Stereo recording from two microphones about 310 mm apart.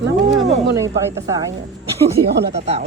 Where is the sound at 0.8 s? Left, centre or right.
Centre.